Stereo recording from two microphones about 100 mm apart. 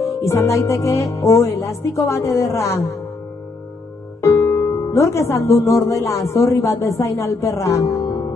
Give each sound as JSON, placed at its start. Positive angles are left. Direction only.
{"t": 0.2, "sound": "a man's voice", "side_deg": 25}
{"t": 4.2, "sound": "music", "side_deg": 30}
{"t": 5.7, "sound": "a man's voice", "side_deg": 30}